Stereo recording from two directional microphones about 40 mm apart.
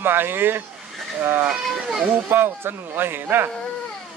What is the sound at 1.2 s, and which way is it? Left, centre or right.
Speech, right.